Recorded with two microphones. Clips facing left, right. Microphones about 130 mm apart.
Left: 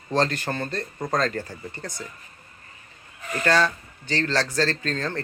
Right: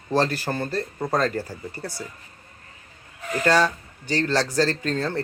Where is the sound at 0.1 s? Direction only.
10° right (ahead or behind).